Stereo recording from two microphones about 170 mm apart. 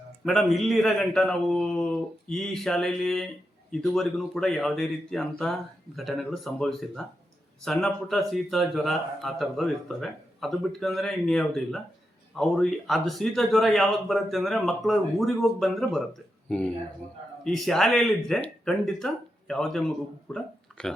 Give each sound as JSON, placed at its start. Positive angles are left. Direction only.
{"t": 0.3, "sound": "a man's voice", "side_deg": 0}
{"t": 17.4, "sound": "a man's voice", "side_deg": 5}